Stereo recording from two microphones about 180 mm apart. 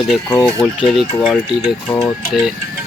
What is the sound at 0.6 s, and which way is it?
Speech, 5° right (ahead or behind).